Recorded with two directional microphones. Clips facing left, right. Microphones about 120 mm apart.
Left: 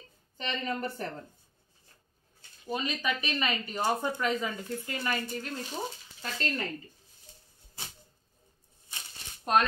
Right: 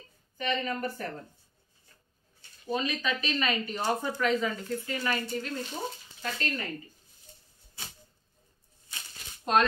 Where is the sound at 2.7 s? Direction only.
15° left (ahead or behind).